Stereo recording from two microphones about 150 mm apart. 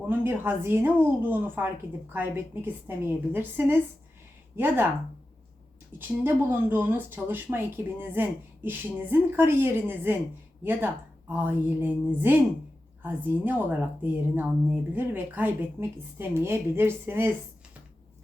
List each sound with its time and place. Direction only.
0.1 s a woman's voice: 15° right (ahead or behind)
6.0 s a woman's voice: 15° right (ahead or behind)